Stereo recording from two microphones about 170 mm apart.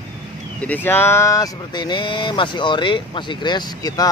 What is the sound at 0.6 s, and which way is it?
Speech, 10° left (ahead or behind).